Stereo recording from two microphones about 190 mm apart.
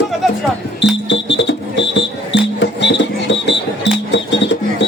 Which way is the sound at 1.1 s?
70° left (ahead or behind).